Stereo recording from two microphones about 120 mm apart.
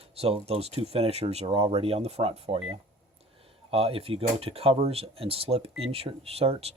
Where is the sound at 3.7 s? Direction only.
55° right (ahead or behind).